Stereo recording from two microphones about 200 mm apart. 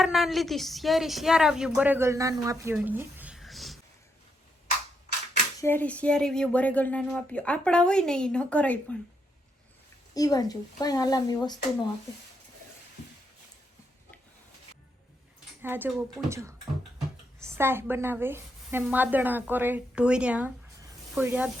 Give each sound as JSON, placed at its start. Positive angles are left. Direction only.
{"t": 0.0, "sound": "speech", "side_deg": 0}
{"t": 2.7, "sound": "a sound", "side_deg": -10}
{"t": 5.5, "sound": "speech", "side_deg": 10}
{"t": 10.2, "sound": "a child's voice", "side_deg": 20}
{"t": 15.6, "sound": "a woman's voice", "side_deg": -10}
{"t": 20.8, "sound": "snake", "side_deg": -10}